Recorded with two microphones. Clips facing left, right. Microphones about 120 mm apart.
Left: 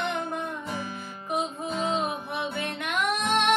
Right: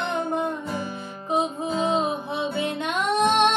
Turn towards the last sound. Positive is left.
turn(degrees=-30)  # may be behind; listen again after turning